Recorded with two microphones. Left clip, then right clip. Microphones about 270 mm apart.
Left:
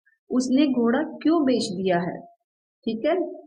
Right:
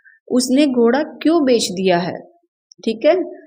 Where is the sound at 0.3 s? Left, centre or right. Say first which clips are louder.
Right 7 dB; right.